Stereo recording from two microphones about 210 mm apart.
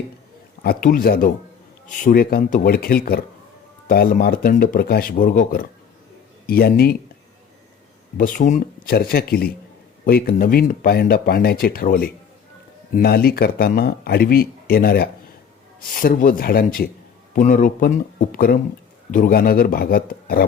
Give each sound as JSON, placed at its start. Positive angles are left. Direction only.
{"t": 0.6, "sound": "speech", "side_deg": 45}
{"t": 8.2, "sound": "speech", "side_deg": 40}